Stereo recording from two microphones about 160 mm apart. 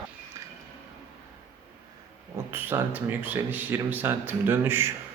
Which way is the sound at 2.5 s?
10° right (ahead or behind).